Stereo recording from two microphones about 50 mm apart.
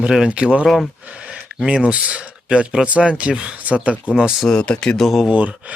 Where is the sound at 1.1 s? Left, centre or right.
Right.